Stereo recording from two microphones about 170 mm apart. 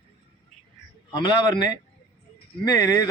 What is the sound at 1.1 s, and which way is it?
Speech, 25° left (ahead or behind).